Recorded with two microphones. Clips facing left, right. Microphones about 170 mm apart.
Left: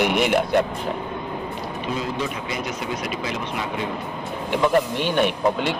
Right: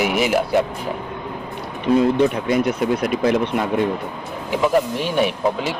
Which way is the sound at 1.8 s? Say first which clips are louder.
Right 12 dB; 55° right (ahead or behind).